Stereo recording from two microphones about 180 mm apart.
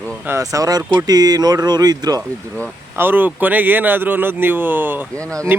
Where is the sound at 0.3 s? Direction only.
15° right (ahead or behind).